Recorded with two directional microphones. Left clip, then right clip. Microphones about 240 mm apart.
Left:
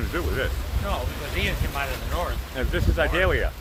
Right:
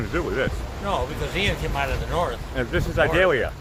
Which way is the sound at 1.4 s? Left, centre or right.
Right.